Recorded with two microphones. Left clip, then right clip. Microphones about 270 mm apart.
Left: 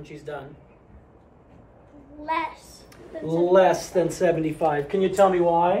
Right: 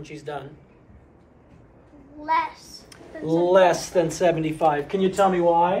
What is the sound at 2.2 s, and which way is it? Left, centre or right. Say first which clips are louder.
Speech: right 4 dB; left.